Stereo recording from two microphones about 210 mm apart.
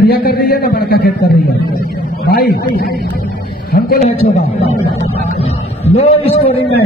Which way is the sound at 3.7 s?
45° left (ahead or behind).